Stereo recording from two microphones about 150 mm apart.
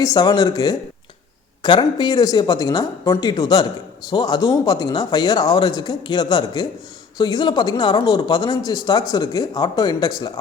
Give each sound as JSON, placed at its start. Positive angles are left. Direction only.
{"t": 0.0, "sound": "speech", "side_deg": 25}